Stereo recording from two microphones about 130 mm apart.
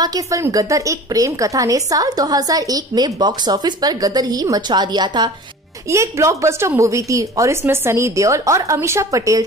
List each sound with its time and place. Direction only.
0.0 s a woman's voice: 25° right (ahead or behind)
5.9 s a woman's voice: 20° right (ahead or behind)